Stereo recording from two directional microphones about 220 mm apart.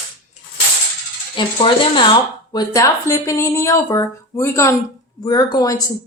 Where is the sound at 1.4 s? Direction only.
25° left (ahead or behind).